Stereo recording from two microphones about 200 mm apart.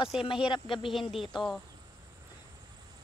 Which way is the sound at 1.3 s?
Centre (ahead or behind).